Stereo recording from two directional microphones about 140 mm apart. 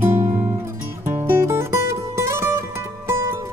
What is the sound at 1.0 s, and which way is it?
Music, 15° right (ahead or behind).